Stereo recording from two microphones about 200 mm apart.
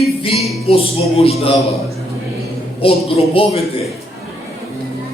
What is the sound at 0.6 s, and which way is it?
Speech, 30° left (ahead or behind).